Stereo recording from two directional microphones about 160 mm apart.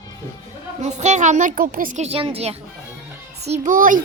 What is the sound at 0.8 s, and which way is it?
A woman's voice, 45° right (ahead or behind).